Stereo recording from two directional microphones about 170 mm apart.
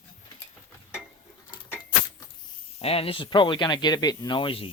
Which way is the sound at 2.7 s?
35° left (ahead or behind).